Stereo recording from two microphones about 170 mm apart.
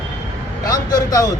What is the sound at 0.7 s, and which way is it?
Speech, 20° left (ahead or behind).